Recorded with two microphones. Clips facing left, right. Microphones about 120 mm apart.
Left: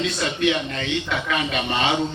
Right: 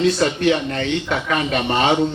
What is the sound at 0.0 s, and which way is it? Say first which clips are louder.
A man's voice: right 6 dB; 40° right (ahead or behind).